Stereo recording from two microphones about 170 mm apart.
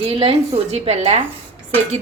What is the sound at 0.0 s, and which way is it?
Speech, 35° right (ahead or behind).